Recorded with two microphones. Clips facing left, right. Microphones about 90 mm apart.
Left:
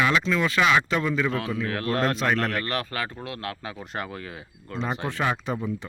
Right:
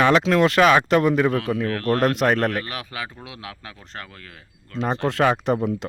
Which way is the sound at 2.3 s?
45° right (ahead or behind).